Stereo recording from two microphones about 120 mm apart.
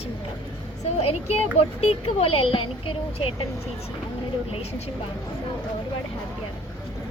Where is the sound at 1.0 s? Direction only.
60° left (ahead or behind).